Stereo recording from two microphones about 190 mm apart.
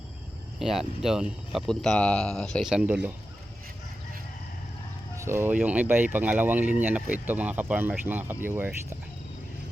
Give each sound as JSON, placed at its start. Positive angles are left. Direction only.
{"t": 0.6, "sound": "speech", "side_deg": 0}
{"t": 5.1, "sound": "speech", "side_deg": -15}